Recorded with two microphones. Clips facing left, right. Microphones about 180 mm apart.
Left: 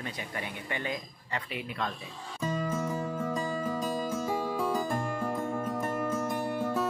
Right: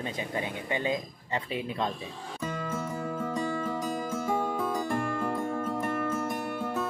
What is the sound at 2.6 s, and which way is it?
Music, 10° left (ahead or behind).